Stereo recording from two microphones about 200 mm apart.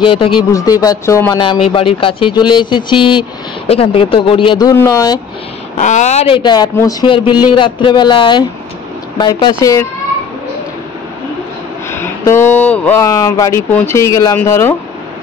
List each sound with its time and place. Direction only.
0.0 s speech: 25° left (ahead or behind)
5.8 s speech: 35° left (ahead or behind); by 9.8 s 15° left (ahead or behind)
11.9 s speech: 10° left (ahead or behind)